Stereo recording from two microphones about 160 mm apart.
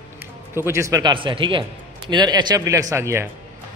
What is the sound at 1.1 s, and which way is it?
A man's voice, 30° right (ahead or behind).